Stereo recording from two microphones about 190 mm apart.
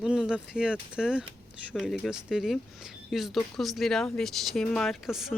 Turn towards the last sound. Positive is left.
turn(degrees=0)  # may be behind; listen again after turning